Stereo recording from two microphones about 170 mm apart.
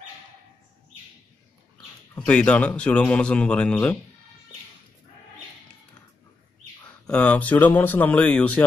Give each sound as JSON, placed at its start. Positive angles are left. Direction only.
{"t": 2.1, "sound": "speech", "side_deg": 5}
{"t": 7.1, "sound": "speech", "side_deg": 10}